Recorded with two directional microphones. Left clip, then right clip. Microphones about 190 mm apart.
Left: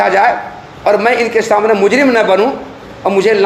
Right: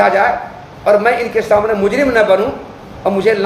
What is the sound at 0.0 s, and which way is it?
A man's voice, 30° left (ahead or behind).